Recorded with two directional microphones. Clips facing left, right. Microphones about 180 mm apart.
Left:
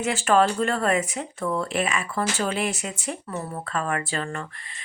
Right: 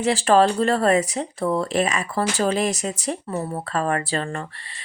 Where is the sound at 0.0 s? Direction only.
35° right (ahead or behind).